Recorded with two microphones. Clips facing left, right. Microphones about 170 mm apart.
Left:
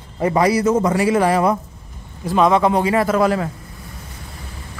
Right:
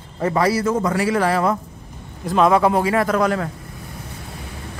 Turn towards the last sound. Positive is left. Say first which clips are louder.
# left 2 dB
turn(degrees=5)  # may be behind; listen again after turning